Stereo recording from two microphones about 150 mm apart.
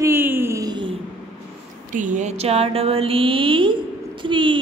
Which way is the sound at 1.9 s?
60° right (ahead or behind).